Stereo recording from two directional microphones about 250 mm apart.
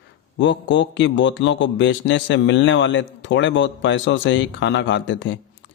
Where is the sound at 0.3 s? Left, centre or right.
Left.